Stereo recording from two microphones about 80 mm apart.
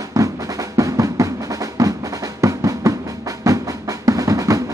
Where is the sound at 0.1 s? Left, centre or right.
Right.